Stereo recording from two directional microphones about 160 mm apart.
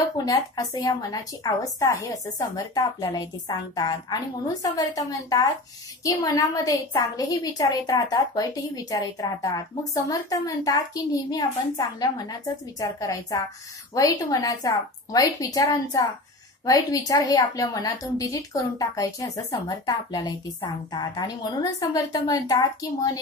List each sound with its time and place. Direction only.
0.2 s a woman's voice: 25° left (ahead or behind)